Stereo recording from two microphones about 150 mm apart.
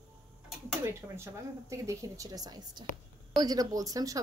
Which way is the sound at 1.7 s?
20° right (ahead or behind).